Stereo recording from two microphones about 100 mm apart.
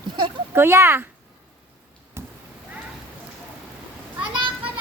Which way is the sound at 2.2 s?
25° right (ahead or behind).